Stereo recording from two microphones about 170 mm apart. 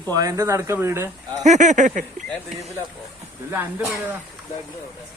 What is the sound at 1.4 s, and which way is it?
Speech, 45° right (ahead or behind).